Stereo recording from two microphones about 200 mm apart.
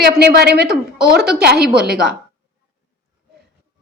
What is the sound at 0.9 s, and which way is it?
Speech, 5° right (ahead or behind).